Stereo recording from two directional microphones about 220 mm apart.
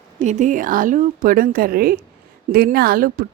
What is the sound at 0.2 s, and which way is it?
A woman's voice, 35° right (ahead or behind).